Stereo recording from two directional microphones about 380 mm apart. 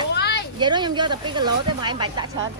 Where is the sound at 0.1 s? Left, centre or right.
Left.